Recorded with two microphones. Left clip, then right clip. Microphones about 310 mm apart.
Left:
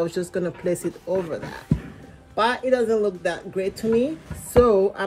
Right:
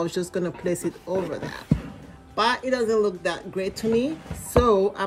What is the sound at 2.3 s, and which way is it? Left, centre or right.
A woman's voice, centre.